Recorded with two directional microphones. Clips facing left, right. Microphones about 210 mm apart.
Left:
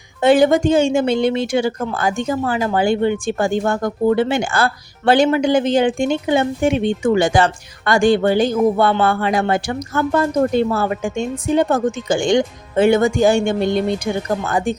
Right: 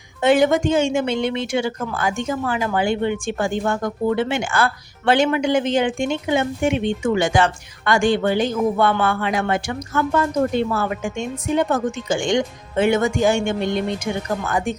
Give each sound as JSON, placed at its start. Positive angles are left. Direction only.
{"t": 0.2, "sound": "speech", "side_deg": 35}